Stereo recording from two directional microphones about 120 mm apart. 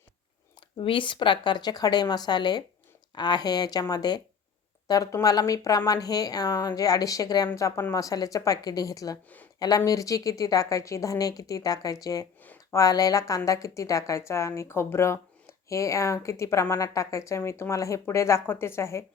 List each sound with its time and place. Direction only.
0.8 s a woman's voice: 45° left (ahead or behind); by 19.0 s 20° left (ahead or behind)